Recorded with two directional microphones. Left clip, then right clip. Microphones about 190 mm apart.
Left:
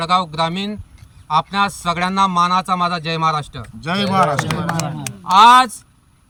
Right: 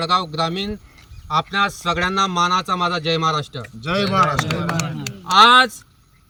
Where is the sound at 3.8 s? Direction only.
20° left (ahead or behind).